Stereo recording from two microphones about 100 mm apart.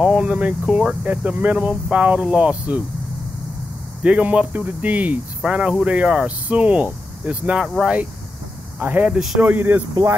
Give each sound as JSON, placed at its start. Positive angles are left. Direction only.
{"t": 0.0, "sound": "speech", "side_deg": -10}
{"t": 4.0, "sound": "speech", "side_deg": -15}